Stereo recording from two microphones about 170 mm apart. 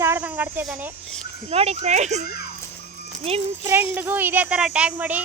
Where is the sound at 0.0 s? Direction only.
10° right (ahead or behind).